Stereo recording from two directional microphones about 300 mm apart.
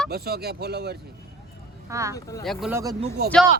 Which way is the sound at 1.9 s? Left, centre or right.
Centre.